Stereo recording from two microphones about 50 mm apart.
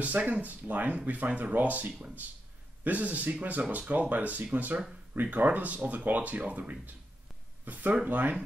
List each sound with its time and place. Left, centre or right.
0.0 s speech: right